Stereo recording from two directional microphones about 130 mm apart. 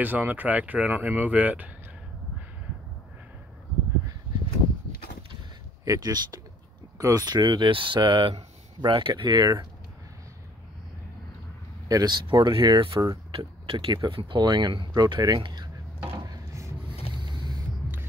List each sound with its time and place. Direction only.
0.0 s speech: 15° right (ahead or behind)
5.9 s speech: 30° right (ahead or behind)
11.9 s speech: 30° right (ahead or behind)
13.3 s speech: 45° right (ahead or behind)
16.3 s a sound: 25° right (ahead or behind)